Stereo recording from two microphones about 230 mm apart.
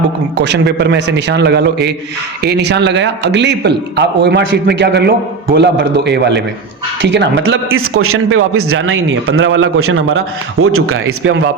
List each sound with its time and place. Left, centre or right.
0.3 s a man's voice: right
11.2 s a man's voice: right